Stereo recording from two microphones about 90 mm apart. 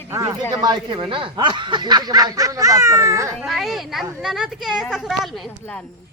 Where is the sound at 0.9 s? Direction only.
70° right (ahead or behind).